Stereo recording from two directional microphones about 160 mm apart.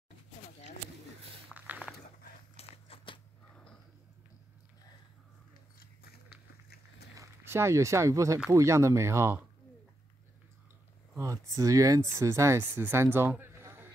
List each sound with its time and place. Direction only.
1.5 s walk: 10° right (ahead or behind)
2.5 s horse: 35° left (ahead or behind)
6.3 s biting: 75° left (ahead or behind)
7.2 s speech: 15° right (ahead or behind)
11.1 s speech: 20° right (ahead or behind)